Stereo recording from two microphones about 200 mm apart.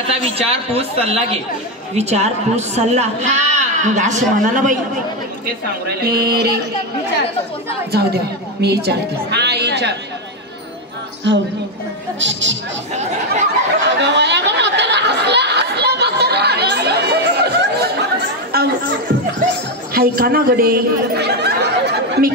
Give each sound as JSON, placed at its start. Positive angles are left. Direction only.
{"t": 0.1, "sound": "a woman's voice", "side_deg": -30}
{"t": 6.0, "sound": "a sound", "side_deg": -50}
{"t": 7.9, "sound": "a woman's voice", "side_deg": -55}
{"t": 12.2, "sound": "a woman's voice", "side_deg": -65}
{"t": 13.8, "sound": "a sound", "side_deg": -60}
{"t": 18.5, "sound": "chatter", "side_deg": -50}
{"t": 19.9, "sound": "speech", "side_deg": -50}